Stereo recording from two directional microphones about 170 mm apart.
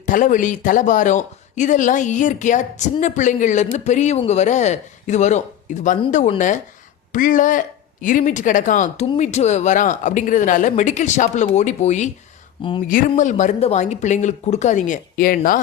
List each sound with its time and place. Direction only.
0.0 s speech: 50° left (ahead or behind)
12.6 s speech: 30° left (ahead or behind)
13.1 s speech: 45° left (ahead or behind)